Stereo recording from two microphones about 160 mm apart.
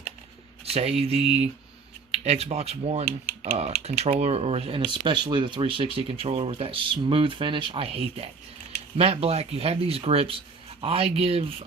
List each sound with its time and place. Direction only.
0.6 s speech: 40° right (ahead or behind)